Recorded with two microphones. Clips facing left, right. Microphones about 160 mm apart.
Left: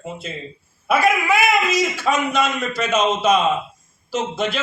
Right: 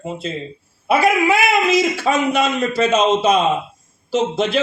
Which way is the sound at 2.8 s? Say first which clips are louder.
Right 4 dB; 35° right (ahead or behind).